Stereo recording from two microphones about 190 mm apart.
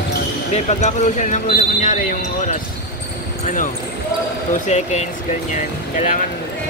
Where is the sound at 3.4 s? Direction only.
45° left (ahead or behind).